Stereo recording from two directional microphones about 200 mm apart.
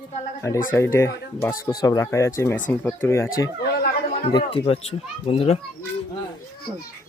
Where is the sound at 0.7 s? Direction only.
15° left (ahead or behind); by 5.6 s 30° left (ahead or behind).